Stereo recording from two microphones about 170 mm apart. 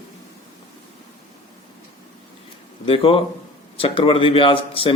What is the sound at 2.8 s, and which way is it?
Speech, 35° left (ahead or behind).